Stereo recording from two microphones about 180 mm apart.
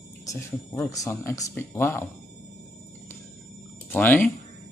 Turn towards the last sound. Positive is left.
turn(degrees=10)  # may be behind; listen again after turning